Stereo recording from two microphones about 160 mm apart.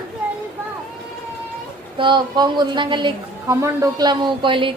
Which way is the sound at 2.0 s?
30° right (ahead or behind).